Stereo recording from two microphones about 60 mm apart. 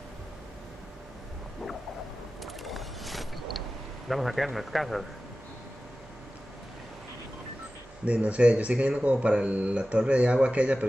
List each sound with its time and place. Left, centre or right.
2.4 s mechanisms: centre
4.1 s speech: centre
8.0 s speech: right